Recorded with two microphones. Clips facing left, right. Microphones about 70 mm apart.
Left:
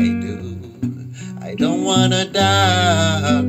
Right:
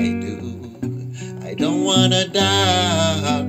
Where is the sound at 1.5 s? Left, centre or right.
Left.